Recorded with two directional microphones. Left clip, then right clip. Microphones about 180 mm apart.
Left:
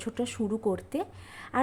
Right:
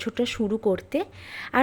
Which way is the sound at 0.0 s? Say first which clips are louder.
Right 6 dB; 10° right (ahead or behind).